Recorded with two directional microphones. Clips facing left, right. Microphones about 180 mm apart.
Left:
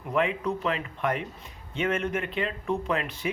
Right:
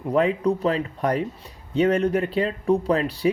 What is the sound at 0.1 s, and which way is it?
Speech, 35° right (ahead or behind).